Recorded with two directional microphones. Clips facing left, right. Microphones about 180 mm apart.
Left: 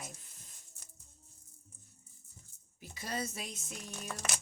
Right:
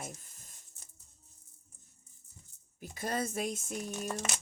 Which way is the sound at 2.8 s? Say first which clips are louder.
Right 5 dB; 50° right (ahead or behind).